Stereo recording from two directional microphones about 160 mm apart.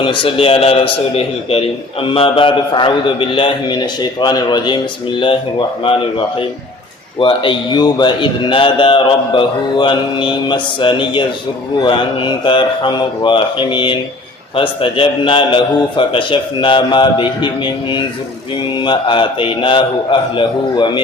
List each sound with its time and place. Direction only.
0.0 s a man's voice: 30° left (ahead or behind)